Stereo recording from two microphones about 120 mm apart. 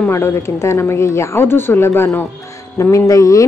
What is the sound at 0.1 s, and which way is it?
Speech, 20° left (ahead or behind).